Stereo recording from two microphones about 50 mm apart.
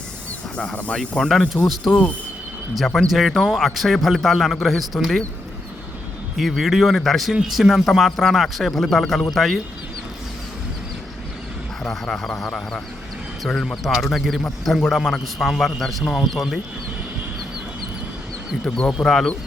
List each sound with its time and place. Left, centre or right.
0.5 s speech: centre
1.2 s a man's voice: centre
6.3 s a man's voice: centre
11.8 s a man's voice: centre
19.0 s speech: centre